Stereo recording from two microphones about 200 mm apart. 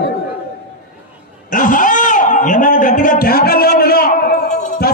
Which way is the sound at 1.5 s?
40° left (ahead or behind).